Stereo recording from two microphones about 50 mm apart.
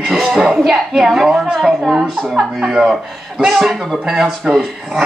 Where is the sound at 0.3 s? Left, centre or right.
Centre.